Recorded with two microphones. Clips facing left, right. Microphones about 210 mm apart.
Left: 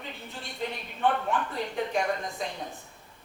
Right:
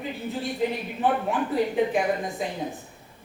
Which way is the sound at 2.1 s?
15° right (ahead or behind).